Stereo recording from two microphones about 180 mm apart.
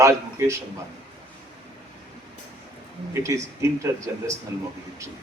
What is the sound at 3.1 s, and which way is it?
Speech, 15° right (ahead or behind).